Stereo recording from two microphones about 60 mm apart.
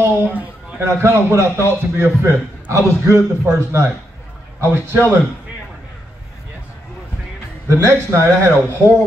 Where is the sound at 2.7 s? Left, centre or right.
Right.